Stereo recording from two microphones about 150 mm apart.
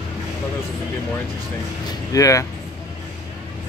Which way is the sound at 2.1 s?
20° left (ahead or behind).